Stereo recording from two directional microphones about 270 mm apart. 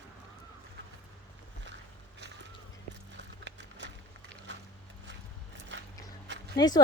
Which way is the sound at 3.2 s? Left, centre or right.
Right.